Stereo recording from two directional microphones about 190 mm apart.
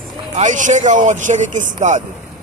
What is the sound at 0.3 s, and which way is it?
Speech, 40° right (ahead or behind).